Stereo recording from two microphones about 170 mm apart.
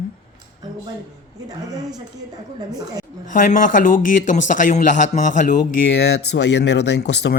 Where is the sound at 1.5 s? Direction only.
20° right (ahead or behind).